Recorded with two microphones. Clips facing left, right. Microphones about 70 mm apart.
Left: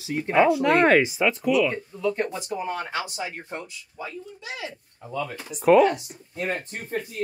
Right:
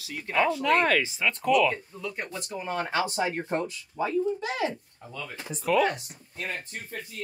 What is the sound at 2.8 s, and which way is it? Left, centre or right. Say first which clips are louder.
A child's voice: right 3 dB; right.